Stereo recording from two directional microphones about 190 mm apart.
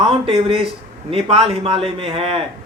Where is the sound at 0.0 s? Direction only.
30° right (ahead or behind).